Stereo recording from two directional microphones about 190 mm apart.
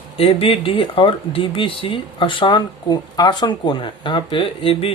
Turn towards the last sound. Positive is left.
turn(degrees=30)  # may be behind; listen again after turning